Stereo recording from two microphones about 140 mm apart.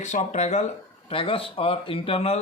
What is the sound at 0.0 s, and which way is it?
Speech, 55° left (ahead or behind).